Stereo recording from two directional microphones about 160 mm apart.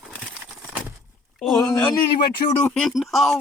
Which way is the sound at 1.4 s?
Centre (ahead or behind).